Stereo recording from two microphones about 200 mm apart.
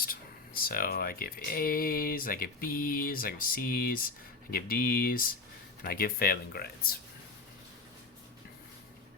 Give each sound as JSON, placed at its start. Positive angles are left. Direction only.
{"t": 0.0, "sound": "speech", "side_deg": 45}